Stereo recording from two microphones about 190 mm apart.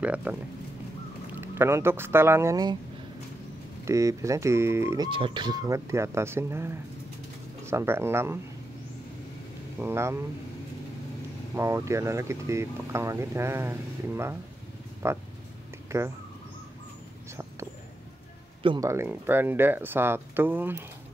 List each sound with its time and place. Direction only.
0.0 s speech: 10° right (ahead or behind)
1.4 s speech: 15° right (ahead or behind)
3.8 s speech: 15° right (ahead or behind)
9.8 s speech: 15° right (ahead or behind)
11.5 s speech: 15° right (ahead or behind)
18.6 s speech: 25° right (ahead or behind)
18.9 s speech: 10° right (ahead or behind)